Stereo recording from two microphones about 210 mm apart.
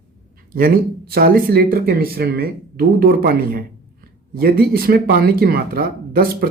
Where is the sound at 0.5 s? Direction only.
45° right (ahead or behind).